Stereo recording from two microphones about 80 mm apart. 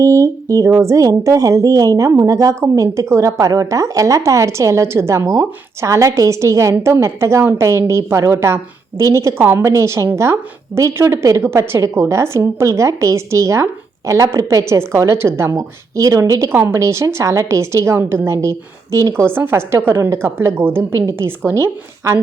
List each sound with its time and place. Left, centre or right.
0.0 s a woman's voice: right
9.4 s a woman's voice: right
9.6 s a woman's voice: right